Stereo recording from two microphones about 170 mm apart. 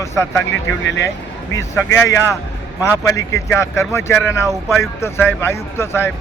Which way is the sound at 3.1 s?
20° left (ahead or behind).